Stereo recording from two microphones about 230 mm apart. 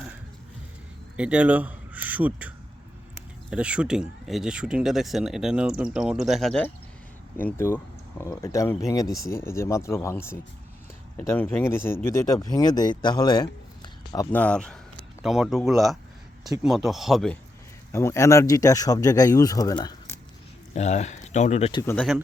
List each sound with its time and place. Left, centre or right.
1.1 s a man's voice: centre
3.5 s speech: centre
17.9 s speech: centre
20.7 s speech: left
21.8 s speech: centre